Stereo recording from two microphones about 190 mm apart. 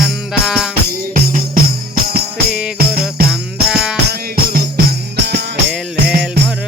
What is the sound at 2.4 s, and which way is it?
Music, 5° right (ahead or behind).